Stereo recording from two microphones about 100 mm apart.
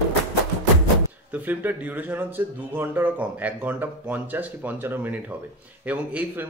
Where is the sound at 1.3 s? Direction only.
20° right (ahead or behind).